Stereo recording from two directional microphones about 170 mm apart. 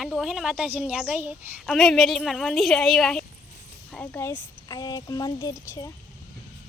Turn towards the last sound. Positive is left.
turn(degrees=20)  # may be behind; listen again after turning